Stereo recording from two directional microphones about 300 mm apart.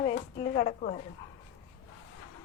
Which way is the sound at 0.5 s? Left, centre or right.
Left.